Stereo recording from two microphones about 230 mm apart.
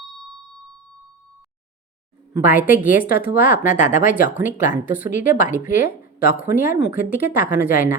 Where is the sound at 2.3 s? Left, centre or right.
Centre.